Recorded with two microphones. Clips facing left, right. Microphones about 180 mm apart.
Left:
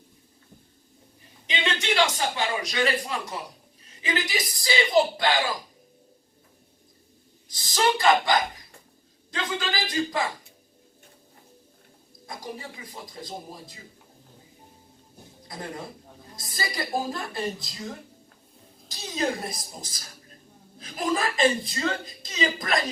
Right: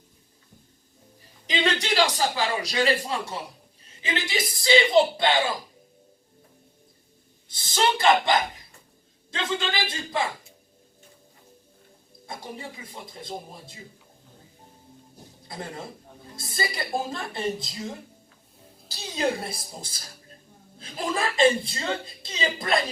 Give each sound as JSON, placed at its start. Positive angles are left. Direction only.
{"t": 1.5, "sound": "a man's voice", "side_deg": -35}
{"t": 7.4, "sound": "a woman's voice", "side_deg": -25}
{"t": 12.2, "sound": "a woman's voice", "side_deg": -25}
{"t": 15.4, "sound": "a man's voice", "side_deg": -25}